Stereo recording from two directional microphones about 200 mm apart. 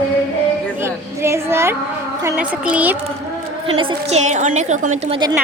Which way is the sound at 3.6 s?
25° right (ahead or behind).